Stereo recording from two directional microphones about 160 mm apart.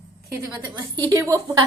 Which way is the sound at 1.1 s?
20° right (ahead or behind).